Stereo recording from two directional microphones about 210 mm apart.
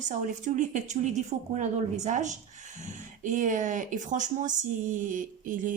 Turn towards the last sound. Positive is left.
turn(degrees=-40)  # may be behind; listen again after turning